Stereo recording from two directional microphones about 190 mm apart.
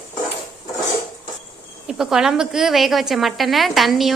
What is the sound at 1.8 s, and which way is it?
A woman's voice, centre (ahead or behind).